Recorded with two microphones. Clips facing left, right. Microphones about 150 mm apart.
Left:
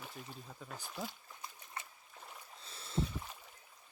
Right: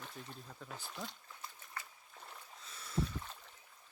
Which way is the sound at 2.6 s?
30° left (ahead or behind).